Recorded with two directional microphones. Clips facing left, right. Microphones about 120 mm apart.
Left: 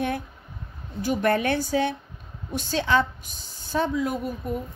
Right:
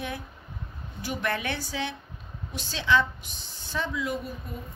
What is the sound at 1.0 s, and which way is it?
A woman's voice, 45° left (ahead or behind).